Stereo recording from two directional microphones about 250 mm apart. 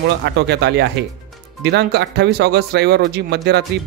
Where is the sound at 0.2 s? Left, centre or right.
Right.